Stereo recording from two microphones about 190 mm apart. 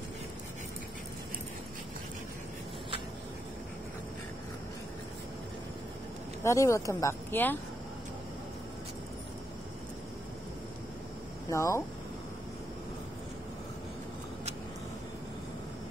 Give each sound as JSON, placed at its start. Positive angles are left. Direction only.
{"t": 6.4, "sound": "speech", "side_deg": 15}
{"t": 11.5, "sound": "speech", "side_deg": 15}